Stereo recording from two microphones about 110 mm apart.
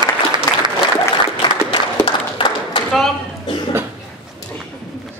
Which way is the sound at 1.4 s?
50° left (ahead or behind).